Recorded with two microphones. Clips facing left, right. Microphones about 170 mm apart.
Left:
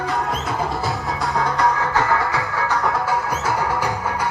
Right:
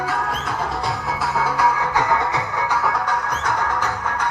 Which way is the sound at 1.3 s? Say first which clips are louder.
Even; 5° right (ahead or behind).